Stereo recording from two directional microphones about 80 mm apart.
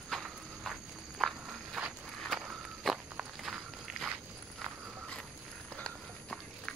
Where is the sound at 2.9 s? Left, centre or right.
Centre.